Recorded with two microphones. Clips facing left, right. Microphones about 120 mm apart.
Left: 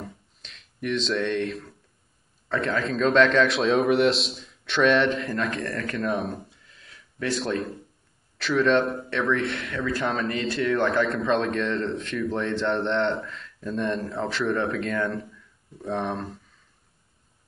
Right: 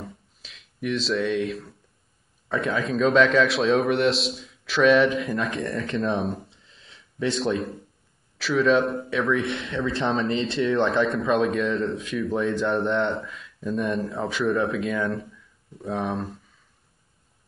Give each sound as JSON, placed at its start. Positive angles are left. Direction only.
{"t": 0.0, "sound": "a sound", "side_deg": -5}
{"t": 2.4, "sound": "a man's voice", "side_deg": -10}
{"t": 5.9, "sound": "speech", "side_deg": -25}
{"t": 6.1, "sound": "a man's voice", "side_deg": 0}
{"t": 6.5, "sound": "a sound", "side_deg": -25}
{"t": 8.4, "sound": "a man's voice", "side_deg": 0}
{"t": 9.5, "sound": "speech", "side_deg": -20}
{"t": 11.1, "sound": "a man's voice", "side_deg": 0}